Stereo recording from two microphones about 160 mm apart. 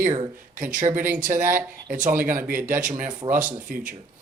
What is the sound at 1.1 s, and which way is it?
Speech, 55° right (ahead or behind).